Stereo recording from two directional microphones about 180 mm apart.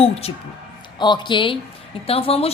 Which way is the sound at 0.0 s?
30° left (ahead or behind).